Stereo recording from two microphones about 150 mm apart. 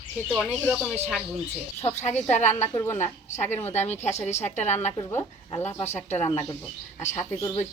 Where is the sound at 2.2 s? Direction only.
50° left (ahead or behind).